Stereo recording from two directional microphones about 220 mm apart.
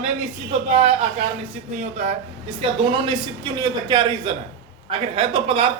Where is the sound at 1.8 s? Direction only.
30° right (ahead or behind).